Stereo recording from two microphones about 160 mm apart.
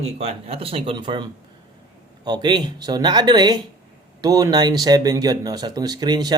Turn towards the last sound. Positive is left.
turn(degrees=-25)  # may be behind; listen again after turning